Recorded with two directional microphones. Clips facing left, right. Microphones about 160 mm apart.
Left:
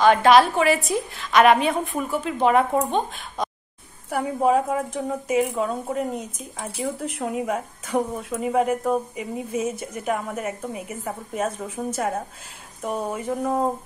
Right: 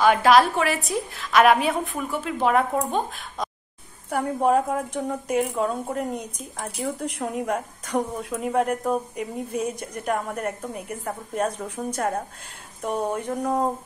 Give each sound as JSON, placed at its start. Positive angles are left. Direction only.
{"t": 0.0, "sound": "a woman's voice", "side_deg": -5}